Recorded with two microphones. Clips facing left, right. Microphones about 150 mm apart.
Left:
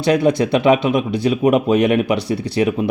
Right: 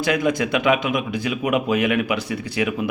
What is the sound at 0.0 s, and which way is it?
Speech, 30° left (ahead or behind).